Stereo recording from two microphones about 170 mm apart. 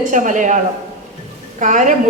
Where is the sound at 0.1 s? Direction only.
50° right (ahead or behind).